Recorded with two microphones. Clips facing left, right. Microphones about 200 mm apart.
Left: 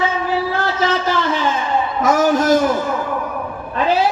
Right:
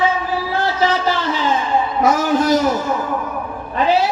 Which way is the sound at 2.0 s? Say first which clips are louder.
Left 1 dB; 45° left (ahead or behind).